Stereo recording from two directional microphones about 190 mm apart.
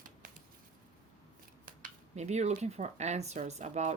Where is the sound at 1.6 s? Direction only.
40° right (ahead or behind).